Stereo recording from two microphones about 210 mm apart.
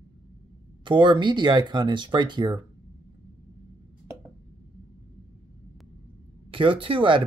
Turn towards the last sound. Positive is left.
turn(degrees=-25)  # may be behind; listen again after turning